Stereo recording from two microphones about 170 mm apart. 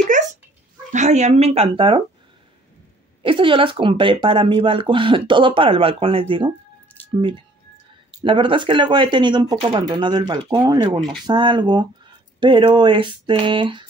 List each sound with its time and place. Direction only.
0.9 s speech: 45° right (ahead or behind)
3.2 s speech: 30° right (ahead or behind)